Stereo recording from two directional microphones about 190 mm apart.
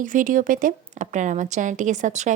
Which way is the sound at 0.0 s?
45° right (ahead or behind).